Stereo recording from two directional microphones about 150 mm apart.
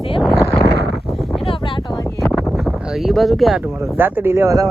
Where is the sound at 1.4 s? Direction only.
35° left (ahead or behind).